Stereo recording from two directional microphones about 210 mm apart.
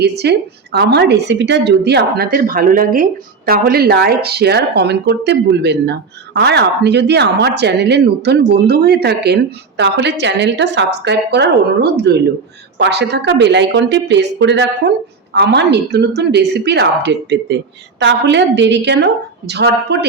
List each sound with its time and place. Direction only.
0.0 s a woman's voice: 50° right (ahead or behind)